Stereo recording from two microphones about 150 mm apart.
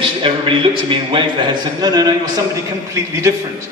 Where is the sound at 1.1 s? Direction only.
30° right (ahead or behind).